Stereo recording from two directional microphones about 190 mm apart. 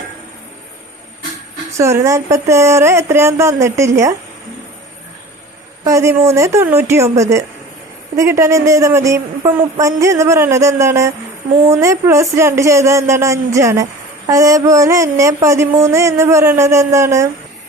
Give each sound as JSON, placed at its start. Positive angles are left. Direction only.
{"t": 1.7, "sound": "speech", "side_deg": -15}
{"t": 5.8, "sound": "speech", "side_deg": -15}